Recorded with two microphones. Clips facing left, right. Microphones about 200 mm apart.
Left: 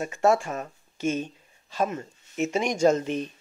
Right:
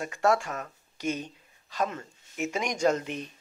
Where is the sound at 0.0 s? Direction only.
25° left (ahead or behind).